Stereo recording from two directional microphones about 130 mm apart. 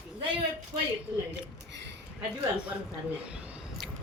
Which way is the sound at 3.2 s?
10° right (ahead or behind).